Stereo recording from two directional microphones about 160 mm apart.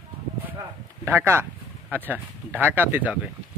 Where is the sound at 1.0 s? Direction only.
15° right (ahead or behind).